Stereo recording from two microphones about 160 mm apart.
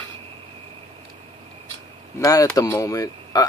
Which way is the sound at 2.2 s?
20° left (ahead or behind).